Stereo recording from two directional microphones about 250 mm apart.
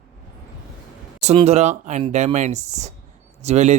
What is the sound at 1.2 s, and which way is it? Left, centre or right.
Speech, right.